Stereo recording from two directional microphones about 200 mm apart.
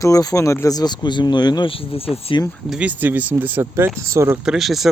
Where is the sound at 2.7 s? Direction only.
5° right (ahead or behind).